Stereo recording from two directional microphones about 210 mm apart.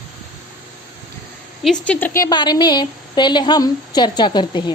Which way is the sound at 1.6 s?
5° left (ahead or behind).